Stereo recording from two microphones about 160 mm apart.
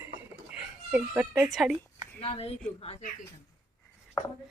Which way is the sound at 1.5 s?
Centre (ahead or behind).